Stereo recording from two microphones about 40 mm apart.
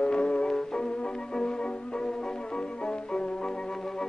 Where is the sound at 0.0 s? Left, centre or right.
Left.